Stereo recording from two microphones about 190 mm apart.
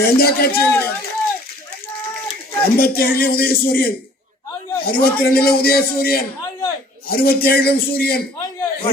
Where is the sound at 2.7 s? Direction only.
55° left (ahead or behind).